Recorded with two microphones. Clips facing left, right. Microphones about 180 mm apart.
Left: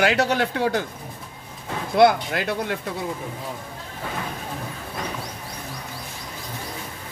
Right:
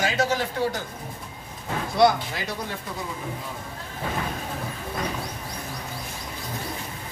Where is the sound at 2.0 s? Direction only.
65° left (ahead or behind).